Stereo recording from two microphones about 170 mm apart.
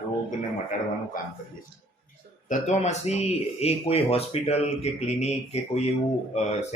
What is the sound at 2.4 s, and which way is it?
Speech, 40° left (ahead or behind).